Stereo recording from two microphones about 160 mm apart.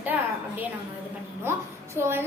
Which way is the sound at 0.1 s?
10° right (ahead or behind).